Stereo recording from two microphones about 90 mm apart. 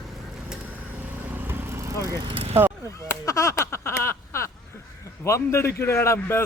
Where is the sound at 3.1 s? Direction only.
35° left (ahead or behind).